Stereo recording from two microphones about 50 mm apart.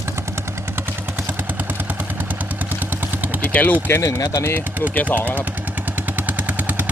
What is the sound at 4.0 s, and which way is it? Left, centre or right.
Speech, left.